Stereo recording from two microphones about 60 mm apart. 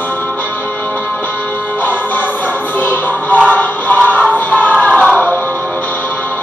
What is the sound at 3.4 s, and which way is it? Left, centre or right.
Music, left.